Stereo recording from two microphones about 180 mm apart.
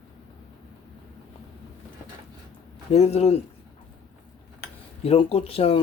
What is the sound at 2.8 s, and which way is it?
Speech, 35° left (ahead or behind).